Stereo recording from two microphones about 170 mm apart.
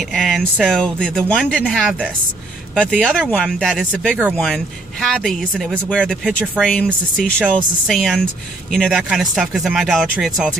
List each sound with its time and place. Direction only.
0.1 s speech: centre (ahead or behind)